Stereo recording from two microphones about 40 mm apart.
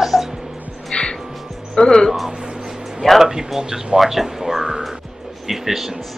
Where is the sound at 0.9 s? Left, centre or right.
Left.